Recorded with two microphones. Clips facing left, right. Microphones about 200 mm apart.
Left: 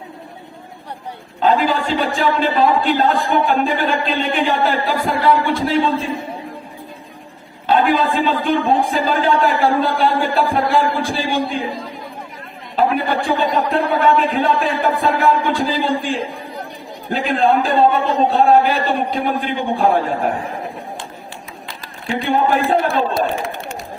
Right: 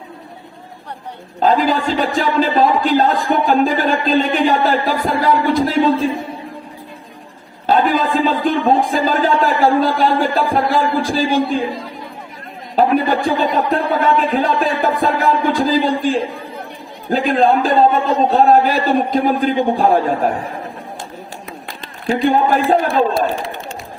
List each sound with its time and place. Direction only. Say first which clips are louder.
1.4 s a man's voice: right 1 dB; 40° right (ahead or behind)
7.7 s a man's voice: right 1 dB; 40° right (ahead or behind)
12.7 s a man's voice: right 3 dB; 40° right (ahead or behind)
21.7 s speech: right 5 dB; 40° right (ahead or behind)